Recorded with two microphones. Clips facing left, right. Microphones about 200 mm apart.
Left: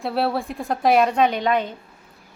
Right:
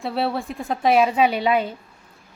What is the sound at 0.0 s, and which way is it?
A woman's voice, centre (ahead or behind).